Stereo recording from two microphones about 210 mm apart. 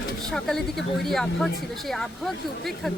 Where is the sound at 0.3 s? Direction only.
Centre (ahead or behind).